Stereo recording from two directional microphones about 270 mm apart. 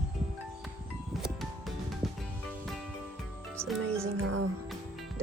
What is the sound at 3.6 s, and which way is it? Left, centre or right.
Music, centre.